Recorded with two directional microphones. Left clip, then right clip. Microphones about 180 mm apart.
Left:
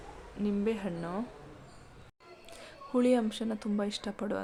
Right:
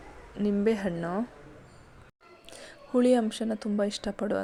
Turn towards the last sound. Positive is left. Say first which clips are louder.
# right 5 dB
turn(degrees=-20)  # may be behind; listen again after turning